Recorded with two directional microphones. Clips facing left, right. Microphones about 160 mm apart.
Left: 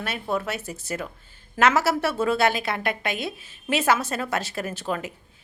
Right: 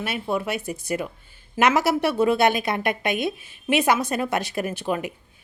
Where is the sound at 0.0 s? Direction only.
10° right (ahead or behind).